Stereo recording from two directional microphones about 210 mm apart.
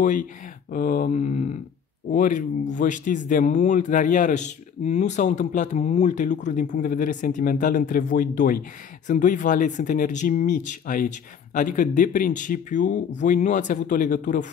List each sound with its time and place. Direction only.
0.0 s speech: 40° left (ahead or behind)